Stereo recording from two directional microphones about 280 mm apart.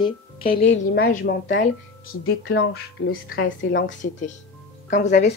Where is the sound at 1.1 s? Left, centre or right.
Left.